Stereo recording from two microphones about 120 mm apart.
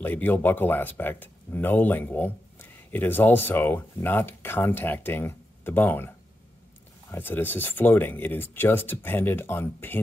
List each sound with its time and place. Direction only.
0.0 s speech: 15° left (ahead or behind)